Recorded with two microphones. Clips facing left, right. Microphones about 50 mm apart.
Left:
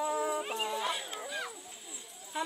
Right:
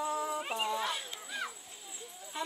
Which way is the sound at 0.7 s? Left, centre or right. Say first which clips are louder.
Right 1 dB; centre.